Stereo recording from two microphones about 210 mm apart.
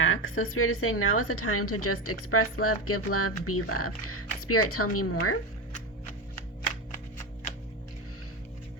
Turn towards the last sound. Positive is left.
turn(degrees=35)  # may be behind; listen again after turning